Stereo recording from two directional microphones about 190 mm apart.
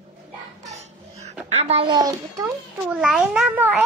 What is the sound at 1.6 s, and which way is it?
Speech, 30° right (ahead or behind).